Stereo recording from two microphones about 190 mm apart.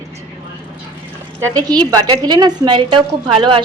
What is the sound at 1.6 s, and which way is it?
A woman's voice, 20° right (ahead or behind).